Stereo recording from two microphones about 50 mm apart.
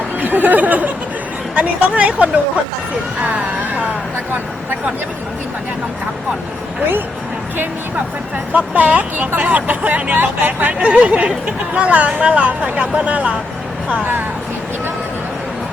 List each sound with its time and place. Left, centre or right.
0.2 s speech: right
8.5 s speech: right